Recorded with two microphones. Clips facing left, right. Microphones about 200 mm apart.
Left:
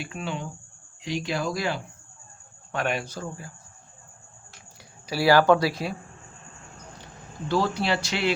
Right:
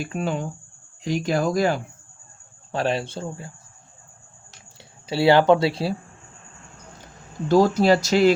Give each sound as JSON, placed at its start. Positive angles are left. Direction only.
{"t": 0.0, "sound": "speech", "side_deg": -45}
{"t": 2.7, "sound": "speech", "side_deg": -30}
{"t": 5.0, "sound": "speech", "side_deg": -25}
{"t": 7.4, "sound": "speech", "side_deg": -40}